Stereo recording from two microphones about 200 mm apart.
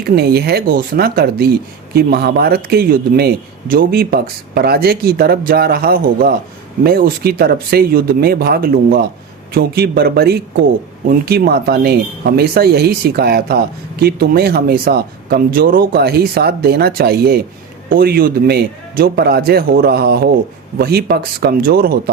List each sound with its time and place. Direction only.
0.0 s a man's voice: 50° right (ahead or behind)